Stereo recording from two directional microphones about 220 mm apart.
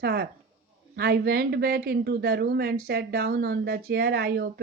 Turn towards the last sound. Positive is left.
turn(degrees=-45)  # may be behind; listen again after turning